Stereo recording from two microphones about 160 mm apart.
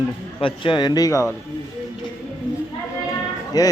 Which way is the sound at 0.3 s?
30° left (ahead or behind).